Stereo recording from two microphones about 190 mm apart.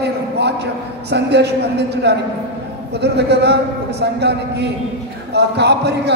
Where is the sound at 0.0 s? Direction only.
60° right (ahead or behind).